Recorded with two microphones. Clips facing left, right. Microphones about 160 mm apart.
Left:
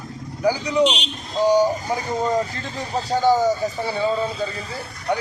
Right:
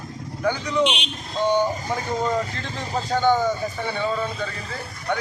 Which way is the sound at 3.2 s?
35° left (ahead or behind).